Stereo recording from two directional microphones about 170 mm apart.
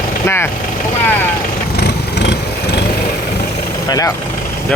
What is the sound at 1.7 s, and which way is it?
Vehicle, 80° left.